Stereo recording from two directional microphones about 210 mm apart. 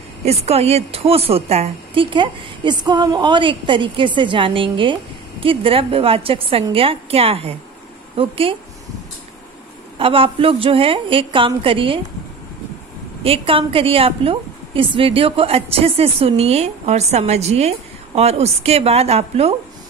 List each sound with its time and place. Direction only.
0.2 s a woman's voice: 30° right (ahead or behind)
9.9 s a woman's voice: 25° right (ahead or behind)
13.2 s a woman's voice: 25° right (ahead or behind)